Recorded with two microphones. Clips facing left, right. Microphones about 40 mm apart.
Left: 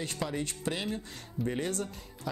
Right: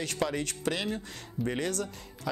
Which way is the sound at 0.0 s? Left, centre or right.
Right.